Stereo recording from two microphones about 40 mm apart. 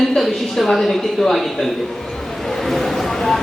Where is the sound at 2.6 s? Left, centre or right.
Centre.